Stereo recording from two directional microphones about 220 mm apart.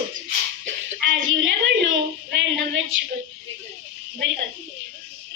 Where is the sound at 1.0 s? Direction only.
60° right (ahead or behind).